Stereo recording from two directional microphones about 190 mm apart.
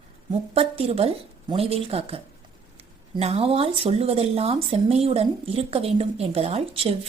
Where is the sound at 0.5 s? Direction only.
30° right (ahead or behind).